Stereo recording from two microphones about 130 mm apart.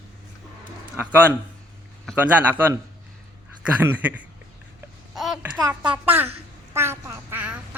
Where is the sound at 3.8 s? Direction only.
15° right (ahead or behind).